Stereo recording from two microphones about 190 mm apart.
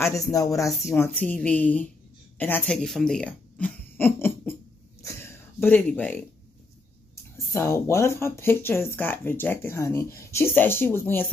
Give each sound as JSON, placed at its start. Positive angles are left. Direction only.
{"t": 0.3, "sound": "speech", "side_deg": 15}
{"t": 5.0, "sound": "a sound", "side_deg": 15}
{"t": 7.5, "sound": "speech", "side_deg": 15}